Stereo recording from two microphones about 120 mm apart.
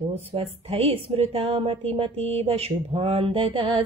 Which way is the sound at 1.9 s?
55° right (ahead or behind).